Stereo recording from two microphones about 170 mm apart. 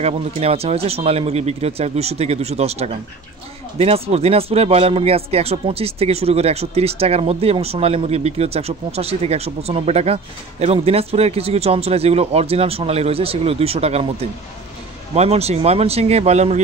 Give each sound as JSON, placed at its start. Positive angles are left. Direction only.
{"t": 0.0, "sound": "speech", "side_deg": -35}
{"t": 15.1, "sound": "speech", "side_deg": -40}